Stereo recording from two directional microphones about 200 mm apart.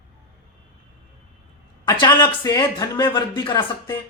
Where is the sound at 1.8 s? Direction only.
20° left (ahead or behind).